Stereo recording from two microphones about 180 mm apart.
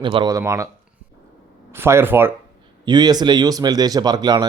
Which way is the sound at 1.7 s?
15° right (ahead or behind).